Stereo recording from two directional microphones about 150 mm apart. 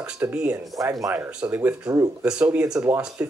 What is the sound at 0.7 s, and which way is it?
Speech, 20° right (ahead or behind).